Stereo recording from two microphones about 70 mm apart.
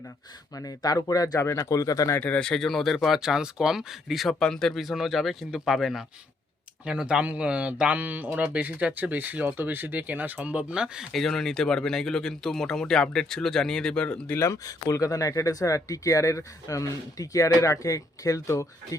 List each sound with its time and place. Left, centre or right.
0.5 s speech: left
1.4 s speech: left
2.1 s speech: left
2.4 s speech: centre
4.4 s speech: centre
6.8 s speech: centre
11.1 s speech: centre
14.3 s speech: left